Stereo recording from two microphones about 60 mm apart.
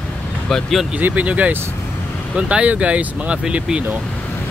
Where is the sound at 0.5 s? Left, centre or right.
Centre.